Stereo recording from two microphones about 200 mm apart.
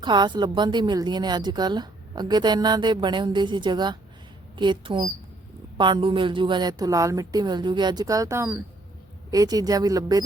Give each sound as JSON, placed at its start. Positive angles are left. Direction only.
{"t": 0.0, "sound": "a woman's voice", "side_deg": -20}